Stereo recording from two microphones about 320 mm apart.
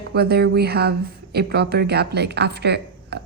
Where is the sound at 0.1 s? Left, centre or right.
Right.